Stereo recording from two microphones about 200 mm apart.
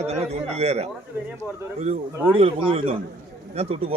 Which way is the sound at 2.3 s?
30° right (ahead or behind).